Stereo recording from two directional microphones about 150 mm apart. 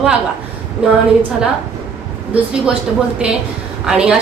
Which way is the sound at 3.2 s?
5° right (ahead or behind).